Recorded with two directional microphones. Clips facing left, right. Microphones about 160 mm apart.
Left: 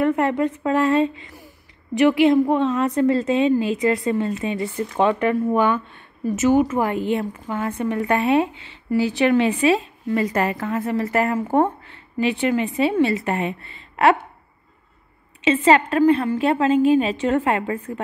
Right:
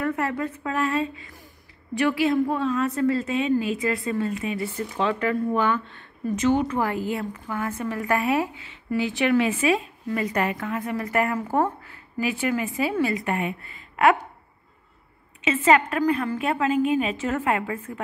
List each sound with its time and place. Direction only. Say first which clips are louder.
0.0 s a woman's voice: left 7 dB; 25° left (ahead or behind)
5.0 s a woman's voice: left 5 dB; 20° left (ahead or behind)
15.4 s a woman's voice: left 4 dB; 30° left (ahead or behind)